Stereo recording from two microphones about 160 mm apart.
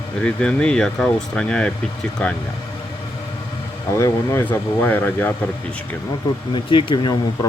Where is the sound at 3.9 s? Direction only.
15° left (ahead or behind).